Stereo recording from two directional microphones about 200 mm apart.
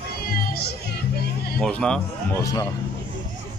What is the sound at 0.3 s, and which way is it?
Music, 45° left (ahead or behind).